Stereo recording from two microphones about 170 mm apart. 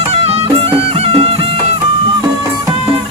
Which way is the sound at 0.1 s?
35° right (ahead or behind).